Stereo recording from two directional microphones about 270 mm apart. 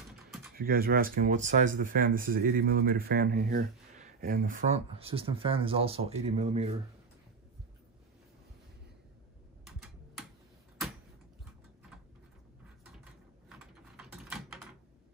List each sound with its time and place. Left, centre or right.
0.6 s speech: right
13.5 s typing: centre